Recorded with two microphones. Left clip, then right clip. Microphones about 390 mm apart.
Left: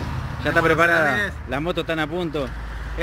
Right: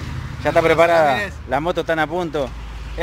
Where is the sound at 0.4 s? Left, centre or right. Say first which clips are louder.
Right 3 dB; centre.